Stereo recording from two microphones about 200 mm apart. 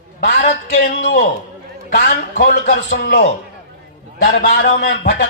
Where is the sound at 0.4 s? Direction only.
35° left (ahead or behind).